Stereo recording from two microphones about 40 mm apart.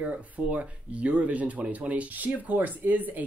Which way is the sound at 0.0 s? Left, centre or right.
Right.